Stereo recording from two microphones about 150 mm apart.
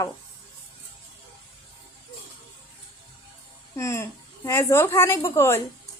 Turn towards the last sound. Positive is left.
turn(degrees=15)  # may be behind; listen again after turning